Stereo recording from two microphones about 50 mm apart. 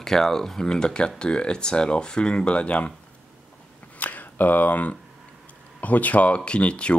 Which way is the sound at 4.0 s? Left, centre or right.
Left.